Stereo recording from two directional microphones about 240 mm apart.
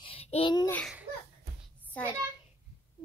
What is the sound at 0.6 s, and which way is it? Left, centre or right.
A child's voice, centre.